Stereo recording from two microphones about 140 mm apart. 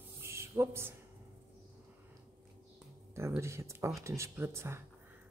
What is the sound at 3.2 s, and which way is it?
Speech, 20° right (ahead or behind).